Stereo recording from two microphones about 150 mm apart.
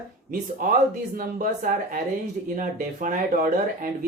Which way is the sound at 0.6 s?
70° right (ahead or behind).